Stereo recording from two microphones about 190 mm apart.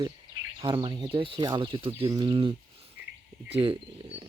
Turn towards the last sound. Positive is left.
turn(degrees=-30)  # may be behind; listen again after turning